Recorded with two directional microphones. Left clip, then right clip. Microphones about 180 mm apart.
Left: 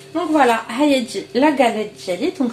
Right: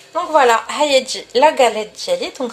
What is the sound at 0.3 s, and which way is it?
A woman's voice, 45° right (ahead or behind).